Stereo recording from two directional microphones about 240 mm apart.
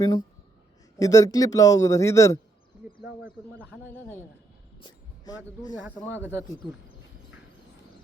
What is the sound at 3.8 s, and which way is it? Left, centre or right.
Speech, centre.